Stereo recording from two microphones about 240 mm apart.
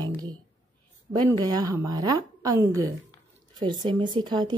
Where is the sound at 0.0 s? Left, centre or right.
Centre.